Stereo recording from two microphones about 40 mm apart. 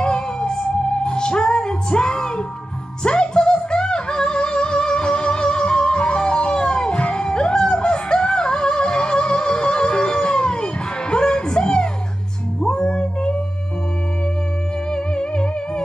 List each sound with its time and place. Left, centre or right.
0.0 s music: left
14.9 s music: left